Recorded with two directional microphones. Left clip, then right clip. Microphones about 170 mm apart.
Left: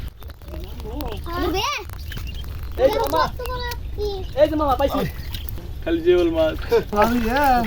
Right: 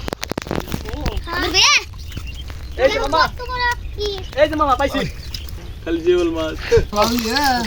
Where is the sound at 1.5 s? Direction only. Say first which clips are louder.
Right 13 dB; 55° left (ahead or behind).